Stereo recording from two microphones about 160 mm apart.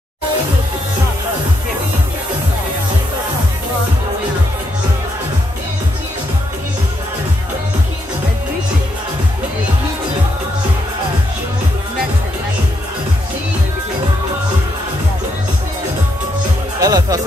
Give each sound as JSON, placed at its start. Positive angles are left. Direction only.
{"t": 16.8, "sound": "music", "side_deg": -25}